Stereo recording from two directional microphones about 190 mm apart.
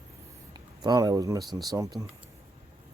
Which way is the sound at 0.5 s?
20° right (ahead or behind).